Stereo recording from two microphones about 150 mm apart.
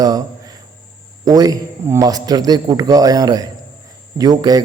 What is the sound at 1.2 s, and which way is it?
A man's voice, 25° right (ahead or behind).